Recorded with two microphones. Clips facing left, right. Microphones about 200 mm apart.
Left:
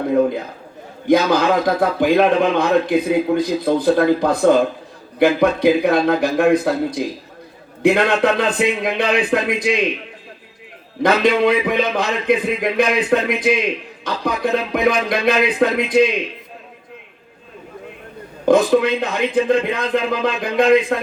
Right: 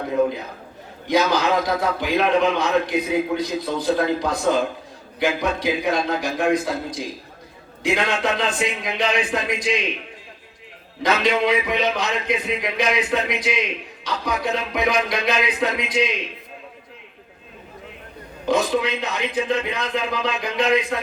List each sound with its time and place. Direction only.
1.0 s a man's voice: 55° left (ahead or behind)
11.0 s a man's voice: 55° left (ahead or behind)
18.4 s a man's voice: 50° left (ahead or behind)